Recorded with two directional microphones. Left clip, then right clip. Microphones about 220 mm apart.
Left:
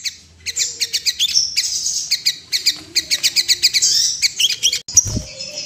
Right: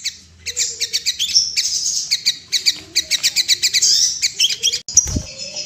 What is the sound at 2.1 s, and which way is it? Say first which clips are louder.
Bird: left 1 dB; 5° left (ahead or behind).